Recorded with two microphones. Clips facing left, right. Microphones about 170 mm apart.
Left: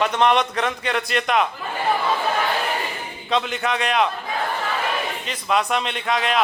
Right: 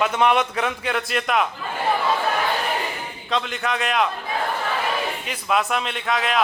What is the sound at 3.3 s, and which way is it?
Speech, centre (ahead or behind).